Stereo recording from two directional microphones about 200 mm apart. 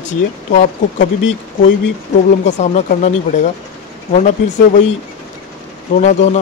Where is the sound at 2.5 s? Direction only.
35° left (ahead or behind).